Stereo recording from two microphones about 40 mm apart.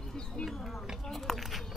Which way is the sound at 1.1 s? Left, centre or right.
Centre.